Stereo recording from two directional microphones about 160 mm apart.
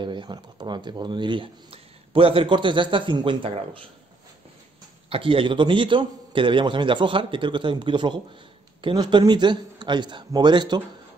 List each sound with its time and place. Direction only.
0.0 s speech: 30° right (ahead or behind)
5.1 s a man's voice: 35° right (ahead or behind)